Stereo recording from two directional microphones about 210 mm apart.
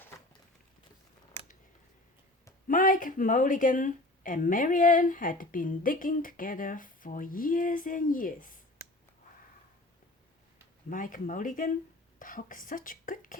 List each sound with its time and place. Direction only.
2.6 s speech: 40° left (ahead or behind)
10.8 s speech: 40° left (ahead or behind)